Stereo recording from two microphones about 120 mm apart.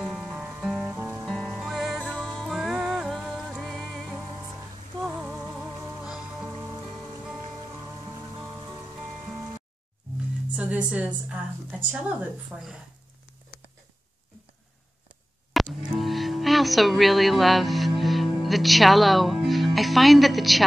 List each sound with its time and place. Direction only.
0.0 s music: 5° right (ahead or behind)
0.8 s music: 20° right (ahead or behind)
1.2 s music: 5° left (ahead or behind)
10.5 s a woman's voice: 10° right (ahead or behind)
15.8 s music: centre (ahead or behind)